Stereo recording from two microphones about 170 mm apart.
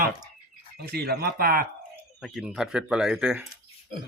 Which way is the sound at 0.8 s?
70° right (ahead or behind).